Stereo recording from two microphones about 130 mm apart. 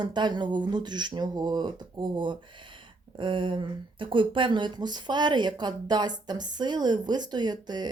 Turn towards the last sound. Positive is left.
turn(degrees=-35)  # may be behind; listen again after turning